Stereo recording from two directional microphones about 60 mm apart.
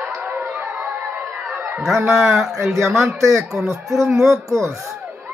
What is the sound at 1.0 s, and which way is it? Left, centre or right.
Crowd, right.